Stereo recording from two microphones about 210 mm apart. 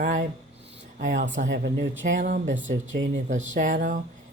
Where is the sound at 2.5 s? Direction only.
65° right (ahead or behind).